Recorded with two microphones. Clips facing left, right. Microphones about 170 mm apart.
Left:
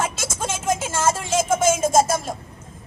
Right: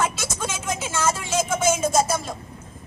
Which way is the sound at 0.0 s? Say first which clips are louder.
Even; 50° left (ahead or behind).